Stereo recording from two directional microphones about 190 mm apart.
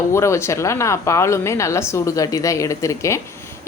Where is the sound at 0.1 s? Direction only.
15° left (ahead or behind).